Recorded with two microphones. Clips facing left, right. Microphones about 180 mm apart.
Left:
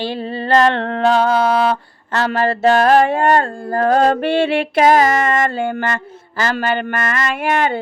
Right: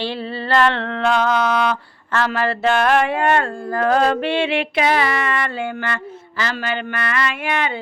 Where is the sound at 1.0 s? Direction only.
35° left (ahead or behind).